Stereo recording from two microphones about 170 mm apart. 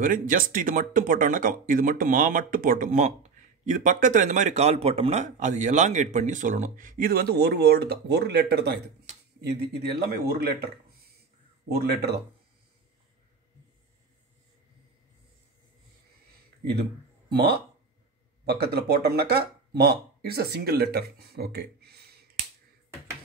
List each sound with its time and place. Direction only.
0.0 s speech: 50° right (ahead or behind); by 10.7 s 65° right (ahead or behind)
11.8 s speech: 70° right (ahead or behind)
18.4 s speech: 70° right (ahead or behind)